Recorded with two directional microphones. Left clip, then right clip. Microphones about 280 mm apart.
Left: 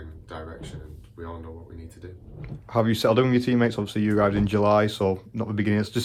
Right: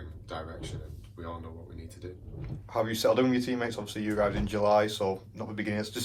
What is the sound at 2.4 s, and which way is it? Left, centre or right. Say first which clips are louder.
Speech: left 6 dB; left.